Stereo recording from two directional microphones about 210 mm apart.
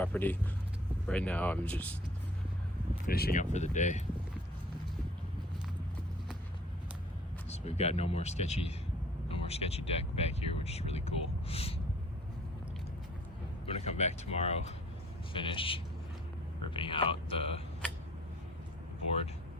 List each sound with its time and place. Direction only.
0.0 s speech: 10° left (ahead or behind)
3.1 s speech: 45° left (ahead or behind)
3.5 s speech: 35° left (ahead or behind)
7.5 s speech: 30° left (ahead or behind)
9.3 s a sound: 30° left (ahead or behind)
13.7 s speech: 30° left (ahead or behind)